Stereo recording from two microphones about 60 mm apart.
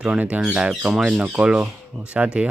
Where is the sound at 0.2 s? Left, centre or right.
Right.